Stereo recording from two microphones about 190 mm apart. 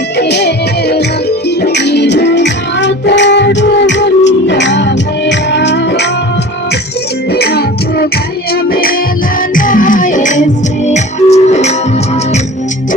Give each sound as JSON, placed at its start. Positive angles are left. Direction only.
{"t": 0.2, "sound": "music", "side_deg": 60}
{"t": 7.3, "sound": "music", "side_deg": 60}